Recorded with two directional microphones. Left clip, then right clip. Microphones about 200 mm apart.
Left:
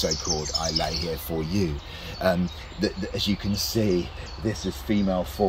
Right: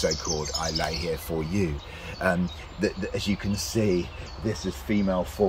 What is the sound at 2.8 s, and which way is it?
Speech, centre (ahead or behind).